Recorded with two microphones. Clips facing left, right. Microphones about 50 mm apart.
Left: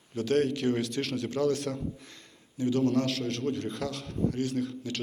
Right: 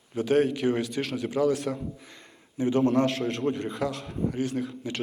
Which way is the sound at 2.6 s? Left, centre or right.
Right.